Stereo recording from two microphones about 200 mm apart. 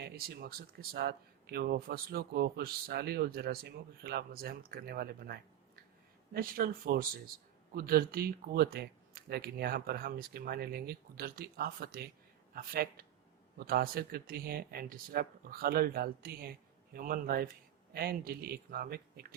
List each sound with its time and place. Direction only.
0.0 s speech: 55° right (ahead or behind)